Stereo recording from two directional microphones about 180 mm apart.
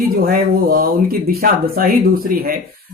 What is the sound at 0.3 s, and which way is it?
Speech, 55° right (ahead or behind).